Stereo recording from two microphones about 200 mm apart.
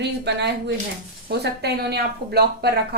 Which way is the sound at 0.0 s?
60° right (ahead or behind).